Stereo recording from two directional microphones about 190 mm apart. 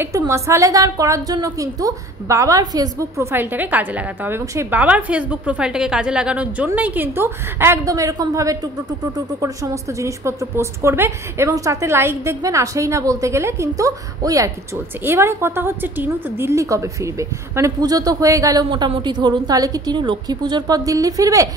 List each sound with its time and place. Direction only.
0.0 s a woman's voice: 15° right (ahead or behind)